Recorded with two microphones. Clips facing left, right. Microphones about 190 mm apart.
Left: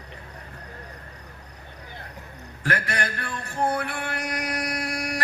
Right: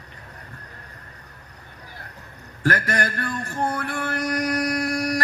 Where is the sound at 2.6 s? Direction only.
40° right (ahead or behind).